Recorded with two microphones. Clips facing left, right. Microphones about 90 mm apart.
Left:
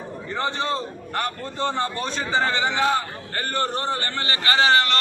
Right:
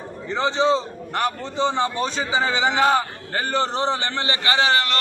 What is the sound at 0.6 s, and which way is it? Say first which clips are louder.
Speech: right 11 dB; 20° right (ahead or behind).